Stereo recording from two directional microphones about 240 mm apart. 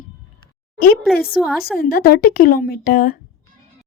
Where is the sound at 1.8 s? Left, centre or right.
Left.